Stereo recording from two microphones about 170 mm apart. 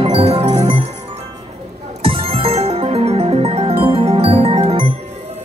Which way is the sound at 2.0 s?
35° right (ahead or behind).